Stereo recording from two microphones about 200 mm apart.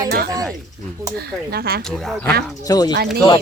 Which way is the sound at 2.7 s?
20° left (ahead or behind).